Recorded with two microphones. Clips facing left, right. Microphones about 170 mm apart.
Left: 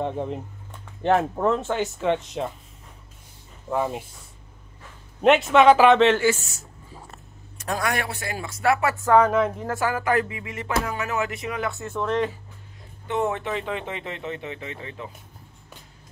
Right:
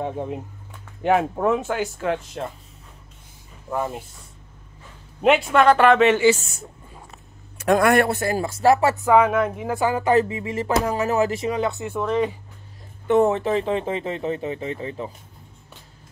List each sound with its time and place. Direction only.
0.0 s speech: 5° right (ahead or behind)
3.7 s speech: centre (ahead or behind)
7.6 s speech: 55° right (ahead or behind); by 8.9 s 30° right (ahead or behind)
8.9 s speech: 10° right (ahead or behind)
9.7 s speech: 20° right (ahead or behind)
10.9 s speech: 40° right (ahead or behind); by 11.9 s 20° right (ahead or behind)
11.9 s speech: 5° right (ahead or behind)
13.0 s speech: 50° right (ahead or behind)
13.3 s speech: 35° right (ahead or behind)